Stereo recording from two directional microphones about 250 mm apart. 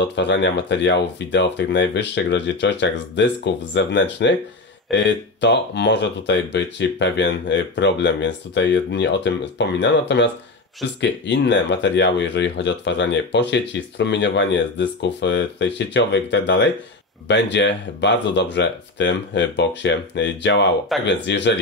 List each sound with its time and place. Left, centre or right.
0.0 s speech: left